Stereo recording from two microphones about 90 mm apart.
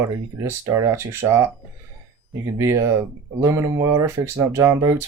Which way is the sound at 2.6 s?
40° right (ahead or behind).